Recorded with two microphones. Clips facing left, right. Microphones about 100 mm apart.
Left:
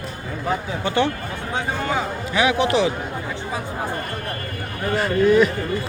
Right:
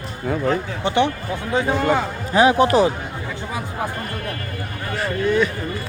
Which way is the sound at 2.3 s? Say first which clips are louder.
Right 5 dB; 35° right (ahead or behind).